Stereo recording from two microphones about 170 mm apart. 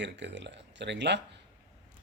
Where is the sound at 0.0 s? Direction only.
90° right.